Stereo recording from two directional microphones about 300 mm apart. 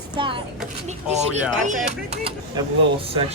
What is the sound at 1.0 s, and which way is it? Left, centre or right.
Speech, right.